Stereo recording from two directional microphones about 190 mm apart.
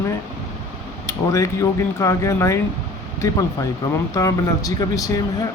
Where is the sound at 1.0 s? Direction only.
15° left (ahead or behind).